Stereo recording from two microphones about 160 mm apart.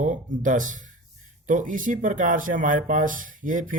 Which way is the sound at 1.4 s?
55° right (ahead or behind).